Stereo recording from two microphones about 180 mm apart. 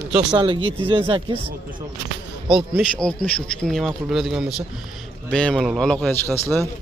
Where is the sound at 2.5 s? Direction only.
Centre (ahead or behind).